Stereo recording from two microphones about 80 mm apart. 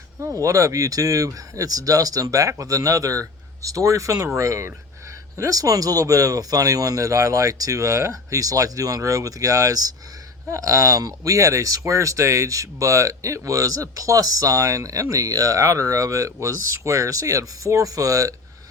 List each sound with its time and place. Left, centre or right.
0.2 s speech: right